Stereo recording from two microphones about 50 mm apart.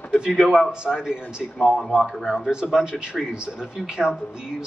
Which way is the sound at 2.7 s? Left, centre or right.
Centre.